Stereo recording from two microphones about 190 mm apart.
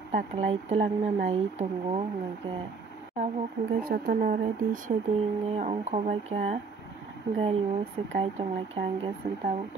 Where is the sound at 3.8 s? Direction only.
50° right (ahead or behind).